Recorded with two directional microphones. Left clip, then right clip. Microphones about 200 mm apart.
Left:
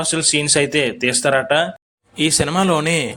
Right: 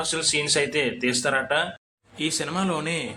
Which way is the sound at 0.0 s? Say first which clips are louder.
Left 6 dB; 35° left (ahead or behind).